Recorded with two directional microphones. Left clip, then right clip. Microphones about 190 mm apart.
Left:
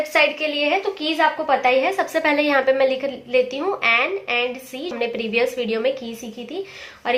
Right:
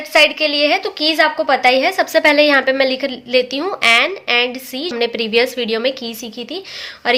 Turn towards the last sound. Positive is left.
turn(degrees=-45)  # may be behind; listen again after turning